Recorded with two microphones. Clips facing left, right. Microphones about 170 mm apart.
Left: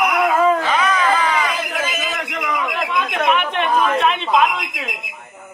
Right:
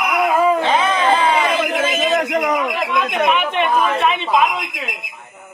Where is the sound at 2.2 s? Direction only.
45° right (ahead or behind).